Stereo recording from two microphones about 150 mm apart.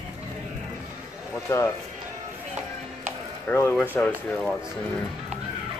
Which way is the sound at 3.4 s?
15° left (ahead or behind).